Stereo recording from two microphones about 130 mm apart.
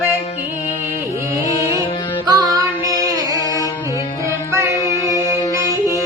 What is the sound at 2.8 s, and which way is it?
Music, 25° right (ahead or behind).